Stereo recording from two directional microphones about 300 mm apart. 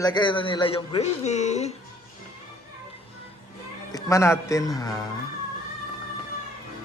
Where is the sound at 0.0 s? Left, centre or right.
Centre.